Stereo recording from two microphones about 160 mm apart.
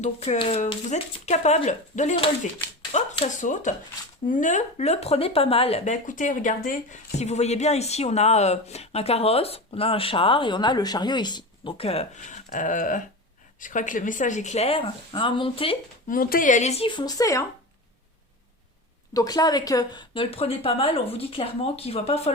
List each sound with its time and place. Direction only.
0.0 s speech: 40° left (ahead or behind)
16.0 s speech: 65° left (ahead or behind); by 17.4 s 20° left (ahead or behind)
19.1 s speech: 25° left (ahead or behind); by 22.3 s 40° left (ahead or behind)